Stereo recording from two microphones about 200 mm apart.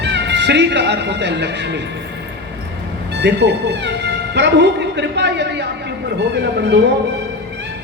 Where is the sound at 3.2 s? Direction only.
60° right (ahead or behind).